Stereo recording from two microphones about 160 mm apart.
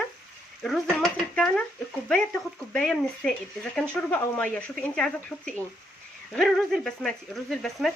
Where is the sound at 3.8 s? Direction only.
10° left (ahead or behind).